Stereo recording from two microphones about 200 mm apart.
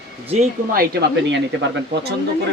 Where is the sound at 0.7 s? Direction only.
50° right (ahead or behind).